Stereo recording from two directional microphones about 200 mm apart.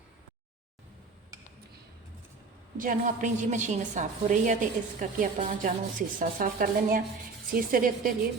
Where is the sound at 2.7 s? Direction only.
40° right (ahead or behind).